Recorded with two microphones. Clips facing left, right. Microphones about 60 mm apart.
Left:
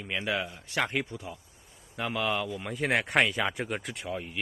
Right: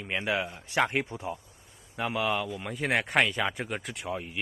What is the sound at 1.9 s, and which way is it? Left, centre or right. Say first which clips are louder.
Speech: right 1 dB; centre.